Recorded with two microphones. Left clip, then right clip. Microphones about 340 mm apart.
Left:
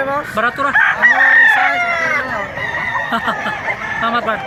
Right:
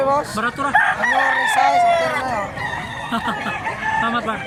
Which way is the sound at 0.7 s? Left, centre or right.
Right.